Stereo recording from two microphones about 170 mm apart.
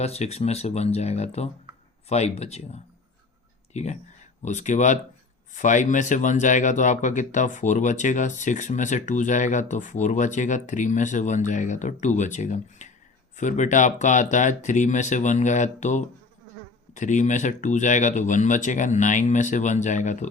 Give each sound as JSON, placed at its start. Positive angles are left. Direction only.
{"t": 0.0, "sound": "speech", "side_deg": 40}